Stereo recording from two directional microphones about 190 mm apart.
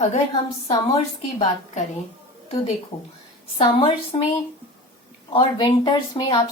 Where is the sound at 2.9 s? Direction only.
35° left (ahead or behind).